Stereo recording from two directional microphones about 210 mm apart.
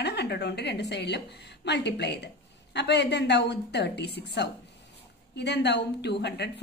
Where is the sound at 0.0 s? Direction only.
50° left (ahead or behind).